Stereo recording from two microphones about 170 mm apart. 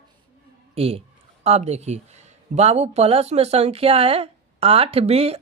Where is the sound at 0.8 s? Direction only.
35° right (ahead or behind).